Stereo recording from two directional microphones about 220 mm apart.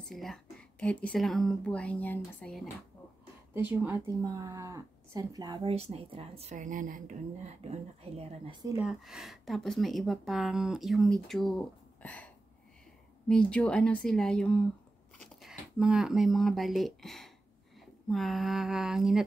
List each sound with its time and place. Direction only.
0.1 s speech: centre (ahead or behind)
3.8 s speech: 15° right (ahead or behind)
8.6 s speech: 5° right (ahead or behind)
13.3 s speech: 5° left (ahead or behind)